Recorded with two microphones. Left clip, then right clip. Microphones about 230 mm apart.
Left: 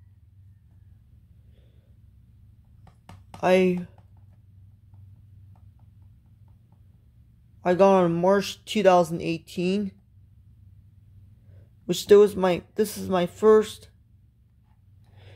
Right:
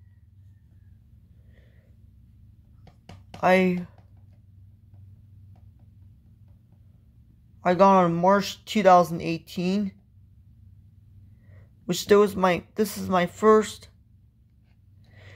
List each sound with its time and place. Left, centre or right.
3.3 s speech: centre
7.6 s speech: centre
11.8 s speech: centre